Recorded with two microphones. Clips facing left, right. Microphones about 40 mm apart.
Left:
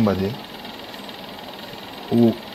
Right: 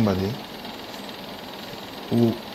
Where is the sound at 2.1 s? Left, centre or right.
Centre.